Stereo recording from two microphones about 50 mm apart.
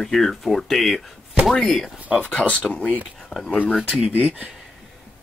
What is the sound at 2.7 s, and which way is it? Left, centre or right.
Speech, left.